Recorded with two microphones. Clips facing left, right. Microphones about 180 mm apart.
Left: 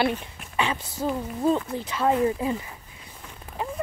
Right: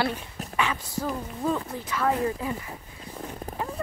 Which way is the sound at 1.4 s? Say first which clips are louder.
Left 5 dB; 25° left (ahead or behind).